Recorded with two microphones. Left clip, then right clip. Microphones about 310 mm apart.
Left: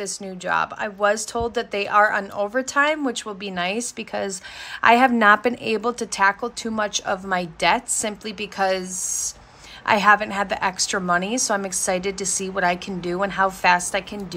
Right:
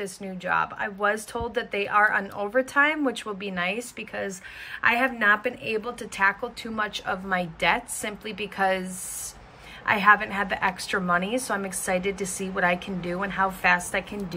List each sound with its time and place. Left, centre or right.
0.0 s a woman's voice: centre
9.8 s a woman's voice: centre